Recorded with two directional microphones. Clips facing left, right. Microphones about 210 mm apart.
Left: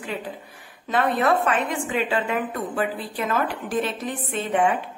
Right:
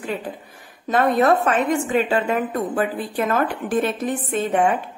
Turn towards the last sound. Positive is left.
turn(degrees=-45)  # may be behind; listen again after turning